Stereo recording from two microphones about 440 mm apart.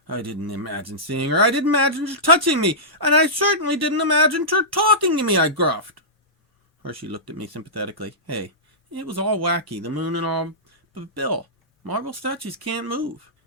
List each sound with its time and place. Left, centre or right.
0.1 s speech: right
7.1 s speech: right